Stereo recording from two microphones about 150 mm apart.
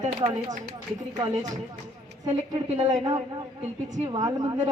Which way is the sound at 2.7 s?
50° right (ahead or behind).